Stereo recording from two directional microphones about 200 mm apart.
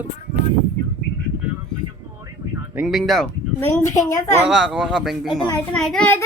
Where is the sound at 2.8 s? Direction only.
Centre (ahead or behind).